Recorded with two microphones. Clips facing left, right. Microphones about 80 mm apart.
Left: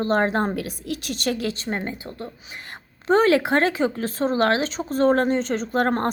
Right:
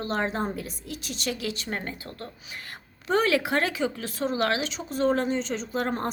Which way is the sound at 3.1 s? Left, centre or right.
Left.